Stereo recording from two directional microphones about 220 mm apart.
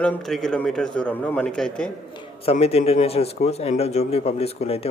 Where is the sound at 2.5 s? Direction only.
25° left (ahead or behind).